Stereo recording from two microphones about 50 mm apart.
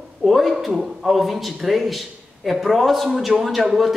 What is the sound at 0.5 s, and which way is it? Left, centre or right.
A man's voice, centre.